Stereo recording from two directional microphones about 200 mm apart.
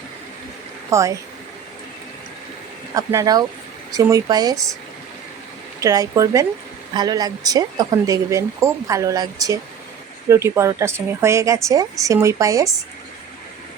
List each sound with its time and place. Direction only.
0.9 s speech: 15° right (ahead or behind)
2.9 s speech: 15° right (ahead or behind)
5.8 s speech: 15° right (ahead or behind)